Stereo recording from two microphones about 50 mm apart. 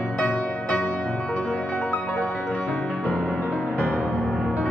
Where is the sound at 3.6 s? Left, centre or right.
Left.